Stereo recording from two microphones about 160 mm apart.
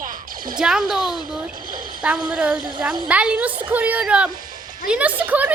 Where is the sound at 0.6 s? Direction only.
5° right (ahead or behind).